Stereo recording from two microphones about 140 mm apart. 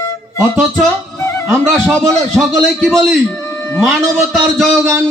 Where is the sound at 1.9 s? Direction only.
5° left (ahead or behind).